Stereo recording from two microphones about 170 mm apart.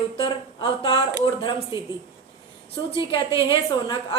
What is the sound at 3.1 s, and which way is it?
A woman's voice, 30° left (ahead or behind).